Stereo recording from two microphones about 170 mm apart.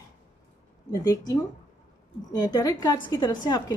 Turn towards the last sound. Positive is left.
turn(degrees=25)  # may be behind; listen again after turning